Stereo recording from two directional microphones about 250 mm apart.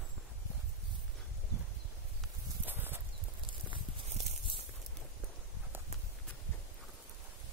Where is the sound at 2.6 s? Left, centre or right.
Centre.